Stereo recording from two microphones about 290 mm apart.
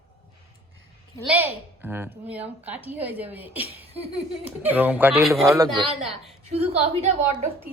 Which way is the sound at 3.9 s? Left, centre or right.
Right.